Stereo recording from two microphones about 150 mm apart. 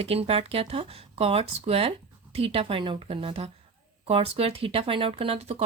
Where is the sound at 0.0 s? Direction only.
40° right (ahead or behind).